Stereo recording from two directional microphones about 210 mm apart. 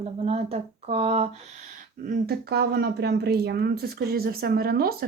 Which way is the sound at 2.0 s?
40° right (ahead or behind).